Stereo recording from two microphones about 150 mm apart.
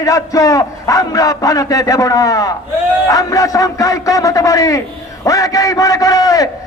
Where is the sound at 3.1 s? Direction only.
25° left (ahead or behind).